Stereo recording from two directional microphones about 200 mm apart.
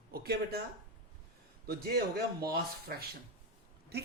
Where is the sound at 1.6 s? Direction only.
50° right (ahead or behind).